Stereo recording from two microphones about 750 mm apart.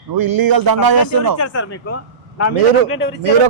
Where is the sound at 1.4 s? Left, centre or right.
Centre.